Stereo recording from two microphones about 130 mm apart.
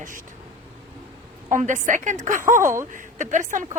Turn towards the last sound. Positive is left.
turn(degrees=-80)